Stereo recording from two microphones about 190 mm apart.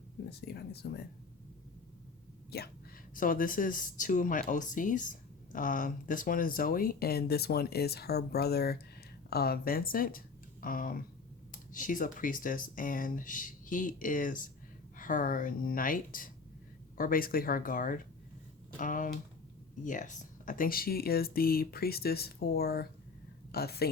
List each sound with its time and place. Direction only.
0.3 s speech: 55° left (ahead or behind)
2.5 s speech: 55° left (ahead or behind)